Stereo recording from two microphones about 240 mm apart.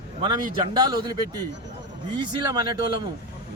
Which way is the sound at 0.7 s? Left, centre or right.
Centre.